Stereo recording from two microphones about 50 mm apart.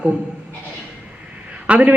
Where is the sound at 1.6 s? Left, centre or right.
Right.